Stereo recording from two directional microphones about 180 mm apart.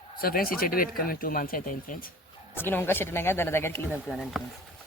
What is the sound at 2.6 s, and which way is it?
Speech, 10° left (ahead or behind).